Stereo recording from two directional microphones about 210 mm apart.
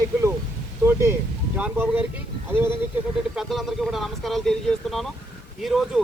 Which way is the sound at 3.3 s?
Centre (ahead or behind).